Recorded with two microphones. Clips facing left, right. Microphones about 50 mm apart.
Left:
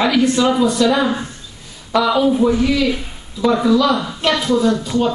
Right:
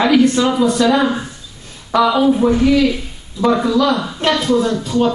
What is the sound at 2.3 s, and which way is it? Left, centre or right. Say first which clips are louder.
A woman's voice: right 2 dB; centre.